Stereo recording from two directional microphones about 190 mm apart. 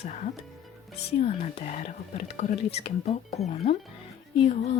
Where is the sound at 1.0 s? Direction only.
35° left (ahead or behind).